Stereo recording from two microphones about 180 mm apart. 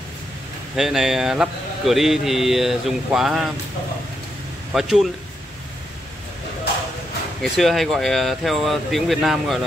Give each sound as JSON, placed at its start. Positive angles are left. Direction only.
{"t": 0.7, "sound": "speech", "side_deg": 0}
{"t": 4.7, "sound": "speech", "side_deg": 0}
{"t": 7.4, "sound": "speech", "side_deg": 0}